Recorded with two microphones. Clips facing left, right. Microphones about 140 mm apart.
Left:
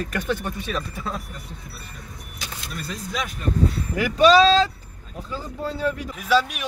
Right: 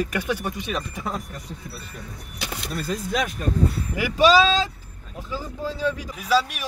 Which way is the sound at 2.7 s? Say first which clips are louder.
Right 5 dB; 50° right (ahead or behind).